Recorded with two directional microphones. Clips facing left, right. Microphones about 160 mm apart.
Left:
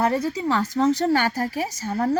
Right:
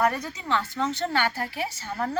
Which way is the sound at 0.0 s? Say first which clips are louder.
Left 4 dB; 30° left (ahead or behind).